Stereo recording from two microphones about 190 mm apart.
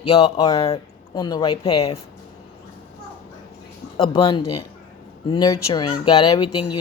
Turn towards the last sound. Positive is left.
turn(degrees=25)  # may be behind; listen again after turning